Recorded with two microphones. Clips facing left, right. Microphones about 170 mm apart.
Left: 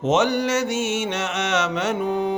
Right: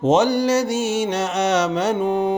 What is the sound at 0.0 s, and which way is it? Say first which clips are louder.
Mantra: right 3 dB; 35° right (ahead or behind).